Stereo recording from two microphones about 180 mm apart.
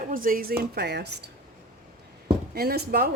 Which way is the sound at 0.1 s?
50° right (ahead or behind).